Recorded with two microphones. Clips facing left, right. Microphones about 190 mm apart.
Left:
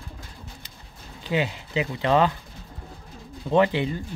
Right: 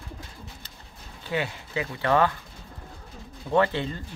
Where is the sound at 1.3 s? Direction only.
20° left (ahead or behind).